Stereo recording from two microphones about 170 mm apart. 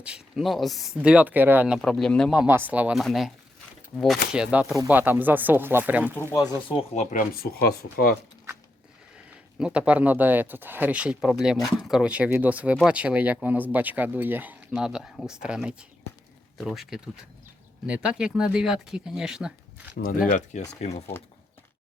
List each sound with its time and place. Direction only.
0.0 s speech: 5° right (ahead or behind)
6.7 s speech: 40° left (ahead or behind); by 8.1 s 65° left (ahead or behind)
9.6 s speech: 5° right (ahead or behind)
20.2 s speech: 45° left (ahead or behind)